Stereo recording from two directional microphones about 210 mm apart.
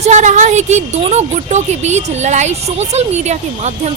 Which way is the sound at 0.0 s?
35° right (ahead or behind).